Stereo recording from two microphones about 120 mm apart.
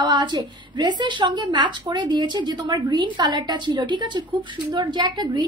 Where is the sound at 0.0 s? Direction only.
40° right (ahead or behind).